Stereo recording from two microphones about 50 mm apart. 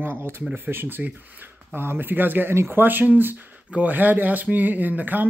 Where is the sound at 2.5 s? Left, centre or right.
Right.